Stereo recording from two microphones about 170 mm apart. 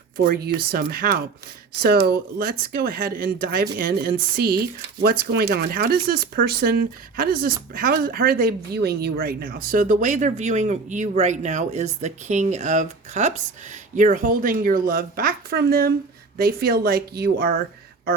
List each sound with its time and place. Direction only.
0.3 s speech: 65° right (ahead or behind)